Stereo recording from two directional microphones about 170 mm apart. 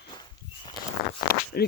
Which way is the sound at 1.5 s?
65° left (ahead or behind).